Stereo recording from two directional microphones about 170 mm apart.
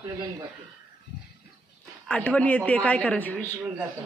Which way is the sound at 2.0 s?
5° left (ahead or behind).